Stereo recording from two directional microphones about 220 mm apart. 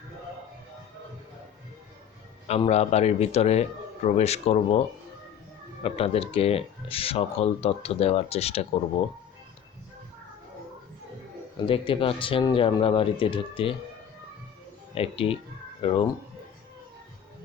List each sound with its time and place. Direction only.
2.5 s speech: 30° left (ahead or behind)
5.8 s speech: 25° left (ahead or behind)
11.5 s speech: 25° left (ahead or behind)
14.9 s speech: 25° left (ahead or behind)